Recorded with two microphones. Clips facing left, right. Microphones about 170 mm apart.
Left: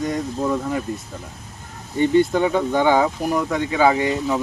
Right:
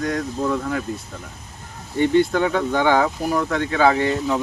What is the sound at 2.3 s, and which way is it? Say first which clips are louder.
Speech: left 1 dB; 10° left (ahead or behind).